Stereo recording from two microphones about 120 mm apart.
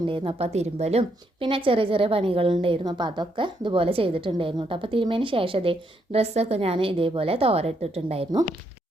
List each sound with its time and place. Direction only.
0.0 s a woman's voice: 45° right (ahead or behind)